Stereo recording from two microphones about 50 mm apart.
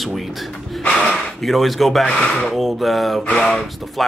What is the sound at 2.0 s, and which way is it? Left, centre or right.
Speech, left.